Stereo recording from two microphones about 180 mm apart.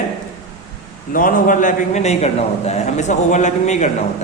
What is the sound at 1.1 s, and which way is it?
A man's voice, 50° left (ahead or behind).